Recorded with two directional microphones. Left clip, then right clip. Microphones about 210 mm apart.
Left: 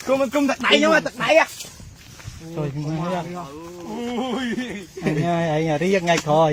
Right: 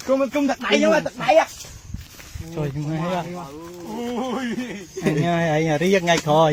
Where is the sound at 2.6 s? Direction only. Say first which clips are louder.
Even; 15° right (ahead or behind).